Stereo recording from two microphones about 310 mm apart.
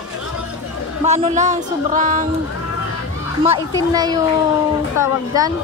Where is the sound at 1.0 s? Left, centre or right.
Right.